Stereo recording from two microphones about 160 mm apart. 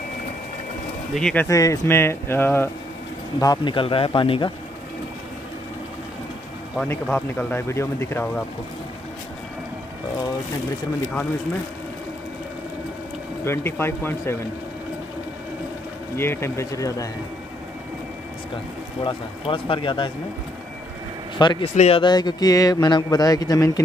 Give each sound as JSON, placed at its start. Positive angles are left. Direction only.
{"t": 1.1, "sound": "speech", "side_deg": 5}
{"t": 1.5, "sound": "speech", "side_deg": 20}
{"t": 3.3, "sound": "speech", "side_deg": 25}
{"t": 6.8, "sound": "speech", "side_deg": 10}
{"t": 13.4, "sound": "speech", "side_deg": 15}
{"t": 16.2, "sound": "speech", "side_deg": 15}
{"t": 19.0, "sound": "speech", "side_deg": 30}
{"t": 21.4, "sound": "speech", "side_deg": 30}
{"t": 21.7, "sound": "speech", "side_deg": 40}
{"t": 22.0, "sound": "speech", "side_deg": 25}